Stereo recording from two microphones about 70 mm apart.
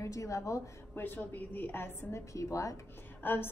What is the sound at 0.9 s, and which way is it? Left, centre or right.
A woman's voice, left.